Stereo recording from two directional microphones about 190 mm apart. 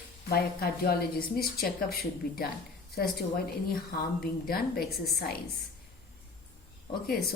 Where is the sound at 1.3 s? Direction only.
55° left (ahead or behind).